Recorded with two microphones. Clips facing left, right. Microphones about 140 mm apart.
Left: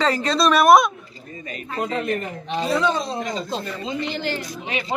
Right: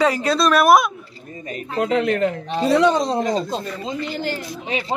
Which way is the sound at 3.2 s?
40° right (ahead or behind).